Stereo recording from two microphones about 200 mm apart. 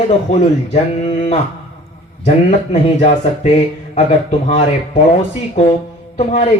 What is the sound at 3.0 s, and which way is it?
Speech, 35° left (ahead or behind).